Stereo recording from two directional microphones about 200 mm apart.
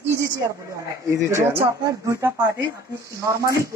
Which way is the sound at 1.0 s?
15° right (ahead or behind).